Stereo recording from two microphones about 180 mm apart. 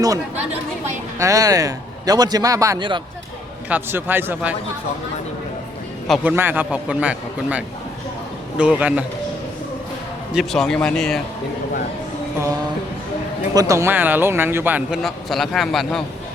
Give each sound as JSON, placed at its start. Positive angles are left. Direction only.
{"t": 1.2, "sound": "a man's voice", "side_deg": -20}
{"t": 3.7, "sound": "a man's voice", "side_deg": -10}
{"t": 6.1, "sound": "a man's voice", "side_deg": -10}
{"t": 10.3, "sound": "speech", "side_deg": 0}
{"t": 13.5, "sound": "a man's voice", "side_deg": -20}